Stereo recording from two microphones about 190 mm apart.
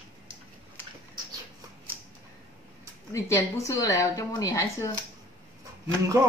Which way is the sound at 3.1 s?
15° left (ahead or behind).